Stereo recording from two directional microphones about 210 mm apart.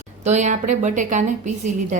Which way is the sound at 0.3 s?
35° right (ahead or behind).